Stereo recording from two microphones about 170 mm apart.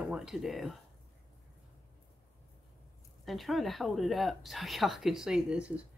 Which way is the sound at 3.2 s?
Centre (ahead or behind).